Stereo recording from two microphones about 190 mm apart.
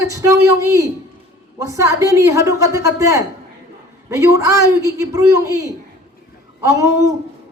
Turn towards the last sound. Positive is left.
turn(degrees=-15)  # may be behind; listen again after turning